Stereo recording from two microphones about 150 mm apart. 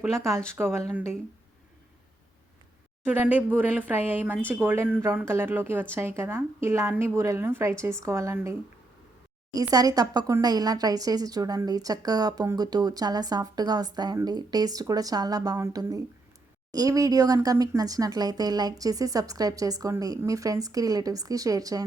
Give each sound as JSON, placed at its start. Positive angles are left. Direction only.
{"t": 0.2, "sound": "speech", "side_deg": -20}
{"t": 3.0, "sound": "a woman's voice", "side_deg": -10}